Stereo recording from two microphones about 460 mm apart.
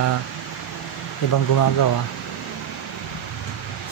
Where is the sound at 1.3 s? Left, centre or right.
Left.